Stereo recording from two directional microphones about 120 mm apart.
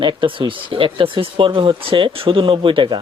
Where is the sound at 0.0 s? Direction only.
45° right (ahead or behind).